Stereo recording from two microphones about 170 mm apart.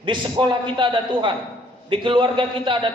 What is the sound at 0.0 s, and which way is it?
A man's voice, 30° right (ahead or behind).